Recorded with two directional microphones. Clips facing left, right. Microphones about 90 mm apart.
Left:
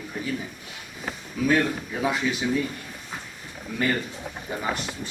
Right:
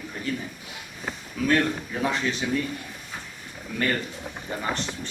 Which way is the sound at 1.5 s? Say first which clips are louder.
Even; 10° left (ahead or behind).